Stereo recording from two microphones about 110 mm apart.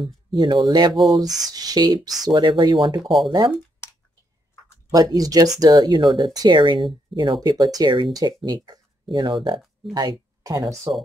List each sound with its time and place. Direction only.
0.0 s speech: 40° right (ahead or behind)
0.9 s speech: centre (ahead or behind)
1.5 s speech: 35° right (ahead or behind)
3.0 s speech: centre (ahead or behind)
3.3 s speech: 45° right (ahead or behind)
4.9 s speech: 35° right (ahead or behind)
7.4 s speech: 35° right (ahead or behind)